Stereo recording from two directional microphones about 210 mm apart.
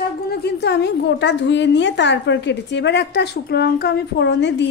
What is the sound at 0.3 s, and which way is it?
A woman's voice, 50° left (ahead or behind).